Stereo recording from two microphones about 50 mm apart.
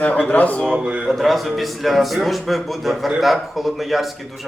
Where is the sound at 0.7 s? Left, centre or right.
Right.